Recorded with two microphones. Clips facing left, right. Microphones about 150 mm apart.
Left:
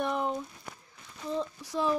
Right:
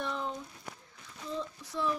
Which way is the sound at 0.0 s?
60° left (ahead or behind).